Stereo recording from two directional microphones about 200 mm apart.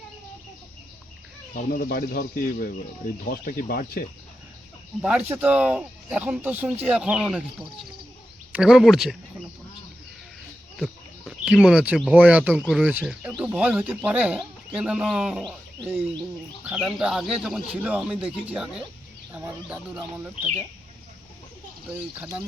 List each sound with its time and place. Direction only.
1.5 s speech: 50° left (ahead or behind)
5.0 s speech: 5° right (ahead or behind)
8.5 s speech: 5° right (ahead or behind)
10.8 s speech: centre (ahead or behind)
16.6 s speech: centre (ahead or behind)